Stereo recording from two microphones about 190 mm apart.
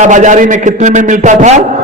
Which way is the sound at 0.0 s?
40° right (ahead or behind).